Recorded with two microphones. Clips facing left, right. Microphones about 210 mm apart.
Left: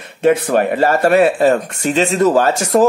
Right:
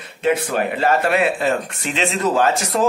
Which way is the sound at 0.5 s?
45° left (ahead or behind).